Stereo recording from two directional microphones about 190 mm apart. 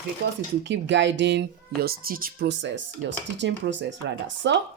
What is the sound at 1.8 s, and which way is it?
Speech, 50° right (ahead or behind).